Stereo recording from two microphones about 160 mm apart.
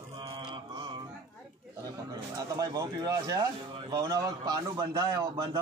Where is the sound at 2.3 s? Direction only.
25° right (ahead or behind).